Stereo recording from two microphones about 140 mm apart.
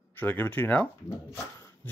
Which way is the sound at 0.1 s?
15° left (ahead or behind).